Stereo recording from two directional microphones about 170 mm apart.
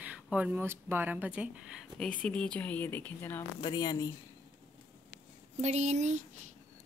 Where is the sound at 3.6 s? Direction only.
25° left (ahead or behind).